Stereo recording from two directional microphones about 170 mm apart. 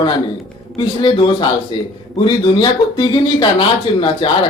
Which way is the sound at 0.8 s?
30° left (ahead or behind).